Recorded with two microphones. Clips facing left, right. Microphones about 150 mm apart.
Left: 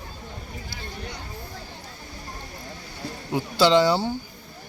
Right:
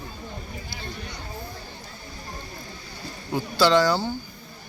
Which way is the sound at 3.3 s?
20° left (ahead or behind).